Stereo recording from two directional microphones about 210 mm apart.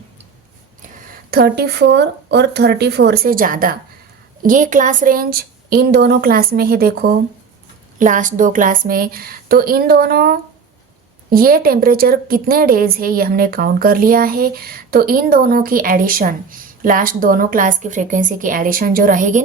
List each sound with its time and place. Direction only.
1.3 s a woman's voice: 45° right (ahead or behind)
7.9 s a woman's voice: 40° right (ahead or behind)